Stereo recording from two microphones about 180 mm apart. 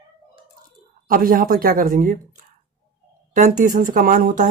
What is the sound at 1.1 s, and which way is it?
Speech, 50° right (ahead or behind).